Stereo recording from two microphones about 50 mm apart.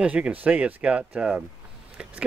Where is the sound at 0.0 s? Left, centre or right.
Right.